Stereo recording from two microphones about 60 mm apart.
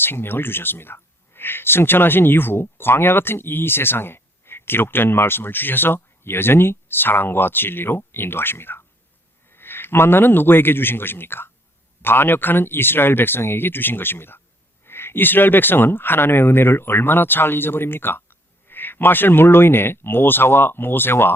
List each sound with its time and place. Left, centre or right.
0.0 s a man's voice: left